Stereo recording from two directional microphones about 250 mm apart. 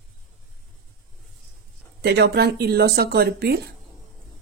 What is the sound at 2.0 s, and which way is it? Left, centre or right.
Speech, right.